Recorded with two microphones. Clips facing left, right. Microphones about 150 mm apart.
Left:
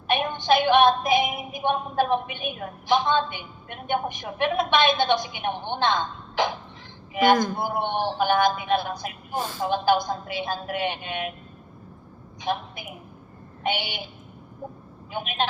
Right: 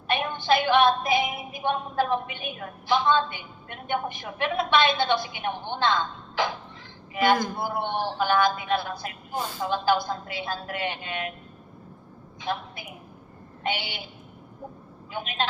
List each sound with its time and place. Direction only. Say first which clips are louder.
0.1 s music: left 2 dB; 20° left (ahead or behind)
9.6 s a woman's voice: left 2 dB; 20° left (ahead or behind)
12.4 s a woman's voice: left 3 dB; 20° left (ahead or behind)
15.1 s music: left 2 dB; 20° left (ahead or behind)